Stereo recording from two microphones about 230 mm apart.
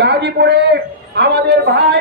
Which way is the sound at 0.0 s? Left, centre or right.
Right.